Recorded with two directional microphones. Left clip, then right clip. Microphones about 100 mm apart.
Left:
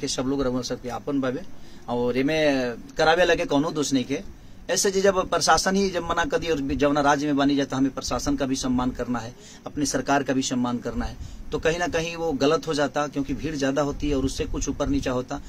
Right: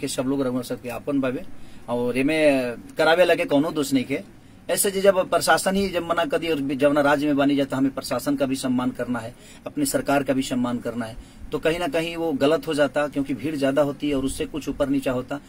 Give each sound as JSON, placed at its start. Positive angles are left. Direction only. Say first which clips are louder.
{"t": 0.0, "sound": "a man's voice", "louder": "right 1 dB", "side_deg": 30}